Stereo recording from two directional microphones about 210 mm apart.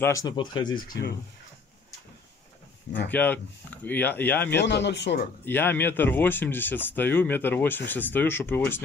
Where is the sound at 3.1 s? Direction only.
10° left (ahead or behind).